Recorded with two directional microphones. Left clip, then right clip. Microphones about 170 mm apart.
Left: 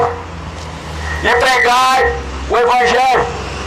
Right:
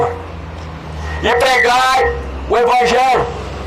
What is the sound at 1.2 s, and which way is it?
Speech, centre (ahead or behind).